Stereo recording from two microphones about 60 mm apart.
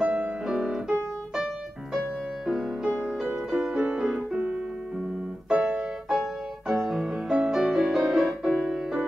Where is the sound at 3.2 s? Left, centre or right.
Centre.